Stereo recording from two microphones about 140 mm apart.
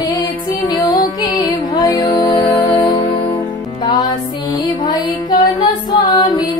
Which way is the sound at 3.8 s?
30° left (ahead or behind).